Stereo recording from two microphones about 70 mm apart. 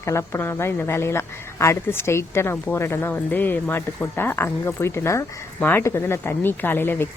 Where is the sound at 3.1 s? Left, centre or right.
Left.